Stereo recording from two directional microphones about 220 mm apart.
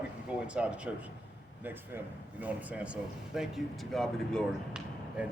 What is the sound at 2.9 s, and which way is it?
A man's voice, centre (ahead or behind).